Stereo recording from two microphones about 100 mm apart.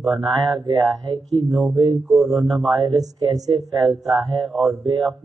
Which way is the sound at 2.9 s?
40° right (ahead or behind).